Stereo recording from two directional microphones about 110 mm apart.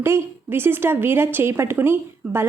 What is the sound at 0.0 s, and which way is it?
A woman's voice, 20° right (ahead or behind).